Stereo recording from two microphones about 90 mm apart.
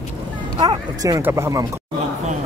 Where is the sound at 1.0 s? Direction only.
45° right (ahead or behind).